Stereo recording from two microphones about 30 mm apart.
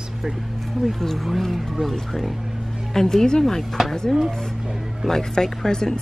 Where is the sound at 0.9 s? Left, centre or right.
Centre.